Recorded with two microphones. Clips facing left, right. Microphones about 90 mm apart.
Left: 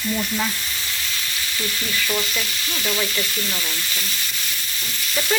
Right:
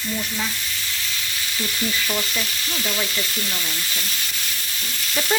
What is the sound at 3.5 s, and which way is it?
Frying, 10° left (ahead or behind).